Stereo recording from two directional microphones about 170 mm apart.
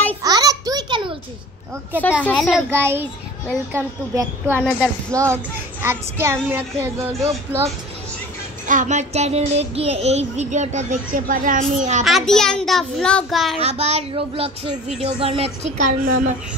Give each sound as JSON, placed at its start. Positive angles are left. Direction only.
{"t": 0.2, "sound": "a sound", "side_deg": -20}
{"t": 2.2, "sound": "a child's voice", "side_deg": 10}
{"t": 2.7, "sound": "a child's voice", "side_deg": -15}
{"t": 4.6, "sound": "a child's voice", "side_deg": 10}
{"t": 5.1, "sound": "a child's voice", "side_deg": -15}
{"t": 8.6, "sound": "child singing", "side_deg": -45}
{"t": 12.0, "sound": "a child's voice", "side_deg": 0}
{"t": 13.6, "sound": "a child's voice", "side_deg": -40}